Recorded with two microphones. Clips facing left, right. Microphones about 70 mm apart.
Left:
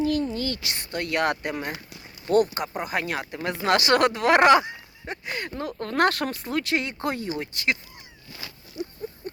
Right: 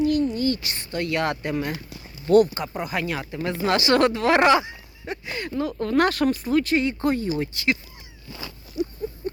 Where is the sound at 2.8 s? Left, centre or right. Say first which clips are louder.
Right 1 dB; left.